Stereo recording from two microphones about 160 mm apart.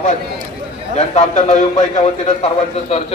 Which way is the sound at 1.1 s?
45° left (ahead or behind).